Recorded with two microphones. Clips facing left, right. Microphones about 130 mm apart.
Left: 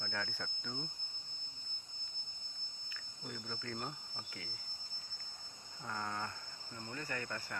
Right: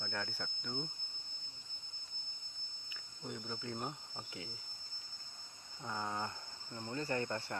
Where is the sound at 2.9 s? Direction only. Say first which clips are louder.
Right 3 dB; 15° right (ahead or behind).